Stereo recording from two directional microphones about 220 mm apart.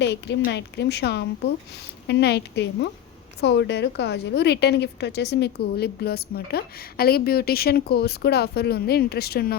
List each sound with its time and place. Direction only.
0.0 s a woman's voice: 50° left (ahead or behind)